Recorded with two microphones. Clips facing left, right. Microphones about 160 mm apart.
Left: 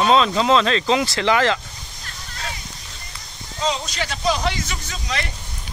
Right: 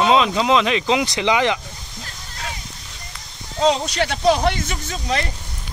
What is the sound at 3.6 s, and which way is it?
Speech, 65° right (ahead or behind).